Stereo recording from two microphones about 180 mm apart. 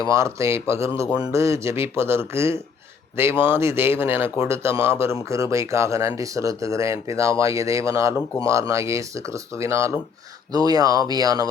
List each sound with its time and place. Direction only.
0.1 s speech: 15° right (ahead or behind)